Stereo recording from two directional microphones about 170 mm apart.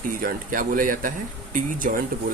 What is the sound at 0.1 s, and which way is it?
Speech, 55° right (ahead or behind).